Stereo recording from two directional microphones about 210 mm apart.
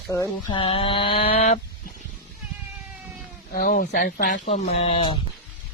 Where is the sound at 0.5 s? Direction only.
25° left (ahead or behind).